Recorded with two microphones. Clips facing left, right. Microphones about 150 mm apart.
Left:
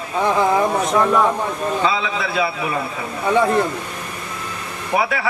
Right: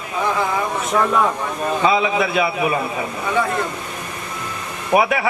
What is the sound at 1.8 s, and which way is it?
Speech, 20° right (ahead or behind).